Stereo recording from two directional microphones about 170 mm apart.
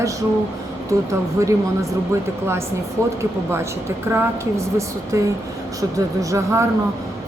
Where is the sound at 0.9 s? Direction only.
20° right (ahead or behind).